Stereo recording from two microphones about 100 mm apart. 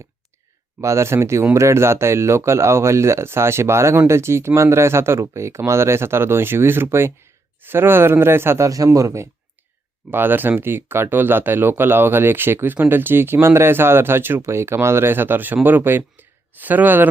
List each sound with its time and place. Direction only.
0.8 s speech: 30° right (ahead or behind)
10.1 s speech: 20° right (ahead or behind)